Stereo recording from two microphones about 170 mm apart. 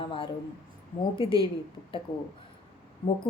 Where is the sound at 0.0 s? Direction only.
30° left (ahead or behind).